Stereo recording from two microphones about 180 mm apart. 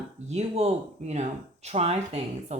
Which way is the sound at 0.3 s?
35° right (ahead or behind).